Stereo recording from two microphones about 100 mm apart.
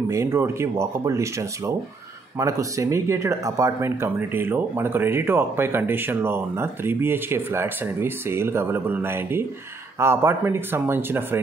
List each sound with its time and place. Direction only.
0.1 s speech: 30° right (ahead or behind)